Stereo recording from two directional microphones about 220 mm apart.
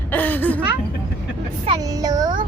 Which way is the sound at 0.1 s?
10° left (ahead or behind).